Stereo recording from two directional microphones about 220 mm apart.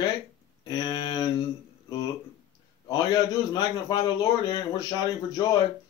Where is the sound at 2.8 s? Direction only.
15° left (ahead or behind).